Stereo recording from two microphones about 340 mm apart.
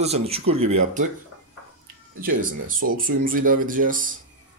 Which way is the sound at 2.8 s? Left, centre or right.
Right.